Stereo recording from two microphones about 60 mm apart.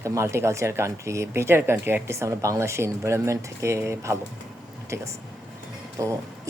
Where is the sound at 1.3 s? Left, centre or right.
Right.